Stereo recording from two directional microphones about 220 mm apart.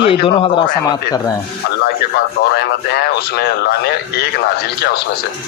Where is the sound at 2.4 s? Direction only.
50° left (ahead or behind).